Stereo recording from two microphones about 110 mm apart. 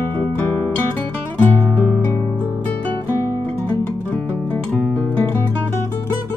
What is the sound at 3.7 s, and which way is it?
Music, 20° left (ahead or behind).